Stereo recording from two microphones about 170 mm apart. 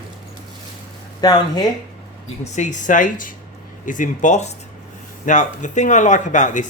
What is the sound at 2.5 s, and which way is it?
A man's voice, 45° left (ahead or behind).